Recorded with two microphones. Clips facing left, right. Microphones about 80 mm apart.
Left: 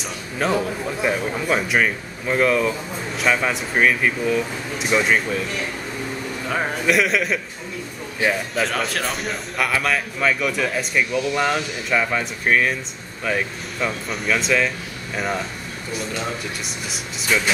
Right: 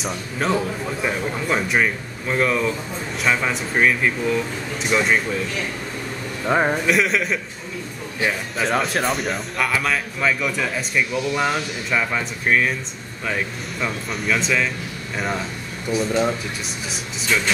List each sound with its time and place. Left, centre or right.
0.0 s speech: centre
6.4 s speech: right
6.9 s speech: centre